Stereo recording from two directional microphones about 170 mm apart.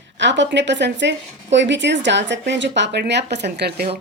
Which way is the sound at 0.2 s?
90° right.